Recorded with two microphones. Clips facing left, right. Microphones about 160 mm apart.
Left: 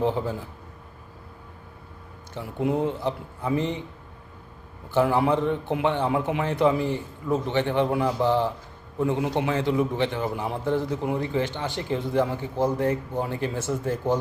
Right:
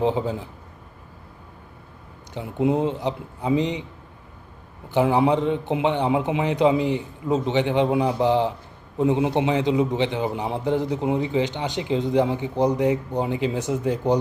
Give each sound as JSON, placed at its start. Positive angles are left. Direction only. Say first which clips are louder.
{"t": 0.0, "sound": "a man's voice", "louder": "right 3 dB", "side_deg": -15}
{"t": 2.3, "sound": "a man's voice", "louder": "right 4 dB", "side_deg": -20}
{"t": 4.9, "sound": "a man's voice", "louder": "right 2 dB", "side_deg": -15}